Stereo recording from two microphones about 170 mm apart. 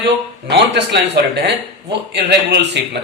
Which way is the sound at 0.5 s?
90° right.